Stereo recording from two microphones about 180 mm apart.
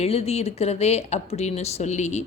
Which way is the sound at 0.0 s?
35° left (ahead or behind).